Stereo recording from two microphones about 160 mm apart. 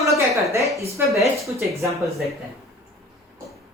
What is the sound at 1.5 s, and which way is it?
Speech, 20° right (ahead or behind).